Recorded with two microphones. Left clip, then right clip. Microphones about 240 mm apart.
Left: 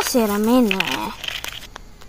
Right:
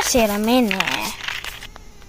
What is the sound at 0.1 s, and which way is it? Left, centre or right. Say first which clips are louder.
Speech: right 1 dB; centre.